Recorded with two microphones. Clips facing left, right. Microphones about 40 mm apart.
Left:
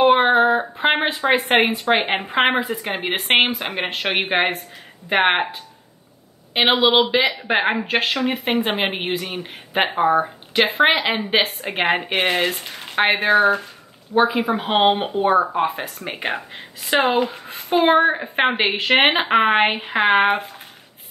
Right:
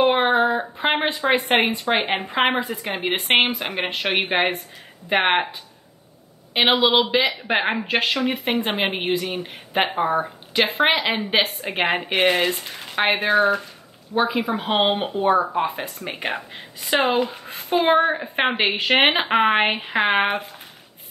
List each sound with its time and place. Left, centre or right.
0.1 s a sound: centre
1.5 s a man's voice: centre
17.1 s speech: centre